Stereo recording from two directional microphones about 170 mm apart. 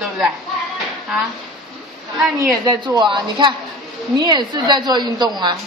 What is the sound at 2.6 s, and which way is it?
A woman's voice, 25° right (ahead or behind).